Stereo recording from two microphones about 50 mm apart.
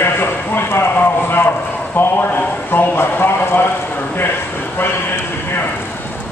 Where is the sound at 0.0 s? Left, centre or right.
Left.